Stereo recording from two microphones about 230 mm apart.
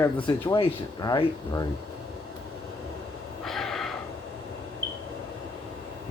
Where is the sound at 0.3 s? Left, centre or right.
Centre.